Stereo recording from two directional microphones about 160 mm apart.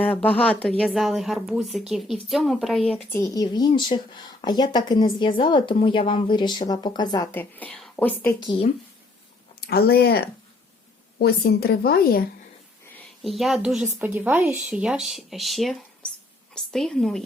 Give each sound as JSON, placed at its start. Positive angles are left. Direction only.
{"t": 0.1, "sound": "a woman's voice", "side_deg": 10}
{"t": 3.1, "sound": "speech", "side_deg": 20}
{"t": 7.3, "sound": "a woman's voice", "side_deg": 10}
{"t": 9.6, "sound": "a woman's voice", "side_deg": 80}
{"t": 13.0, "sound": "a woman's voice", "side_deg": 0}